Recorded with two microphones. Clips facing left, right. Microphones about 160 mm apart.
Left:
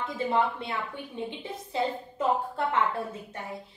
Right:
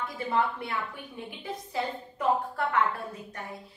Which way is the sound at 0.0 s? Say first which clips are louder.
Left 2 dB; 25° left (ahead or behind).